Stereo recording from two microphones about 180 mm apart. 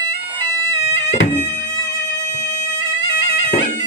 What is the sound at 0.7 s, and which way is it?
Music, 40° left (ahead or behind).